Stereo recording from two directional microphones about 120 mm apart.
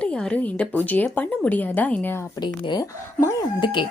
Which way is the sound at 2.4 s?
35° left (ahead or behind).